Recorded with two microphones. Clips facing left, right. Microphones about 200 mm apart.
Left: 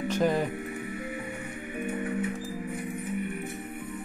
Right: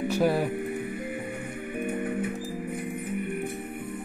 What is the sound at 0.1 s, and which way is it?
Speech, 10° right (ahead or behind).